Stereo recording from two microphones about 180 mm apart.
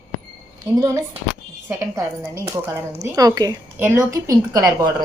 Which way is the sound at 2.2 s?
15° right (ahead or behind).